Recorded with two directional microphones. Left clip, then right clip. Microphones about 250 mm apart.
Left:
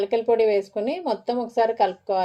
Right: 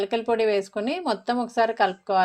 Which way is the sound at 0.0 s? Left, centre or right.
Right.